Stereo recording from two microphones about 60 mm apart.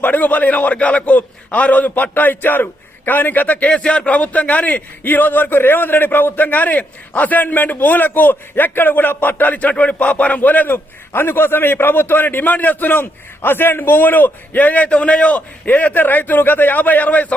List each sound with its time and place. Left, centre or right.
0.0 s a man's voice: left